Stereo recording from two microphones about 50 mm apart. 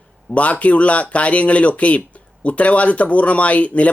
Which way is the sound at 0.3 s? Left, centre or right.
Left.